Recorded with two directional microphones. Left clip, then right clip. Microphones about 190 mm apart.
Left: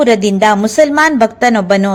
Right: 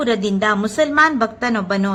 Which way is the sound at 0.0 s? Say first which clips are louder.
Left 9 dB; 25° left (ahead or behind).